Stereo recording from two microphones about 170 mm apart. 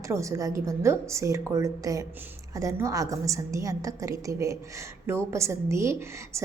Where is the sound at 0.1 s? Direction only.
20° right (ahead or behind).